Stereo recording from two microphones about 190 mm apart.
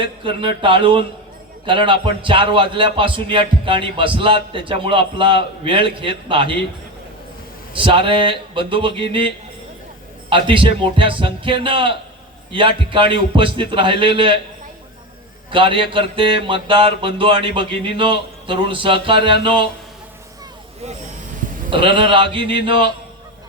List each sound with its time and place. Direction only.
0.0 s speech: 25° right (ahead or behind)
7.7 s a man's voice: 25° right (ahead or behind)
15.4 s speech: 25° right (ahead or behind)
21.7 s speech: 25° right (ahead or behind)